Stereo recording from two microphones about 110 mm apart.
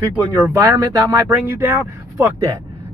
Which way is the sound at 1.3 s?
25° right (ahead or behind).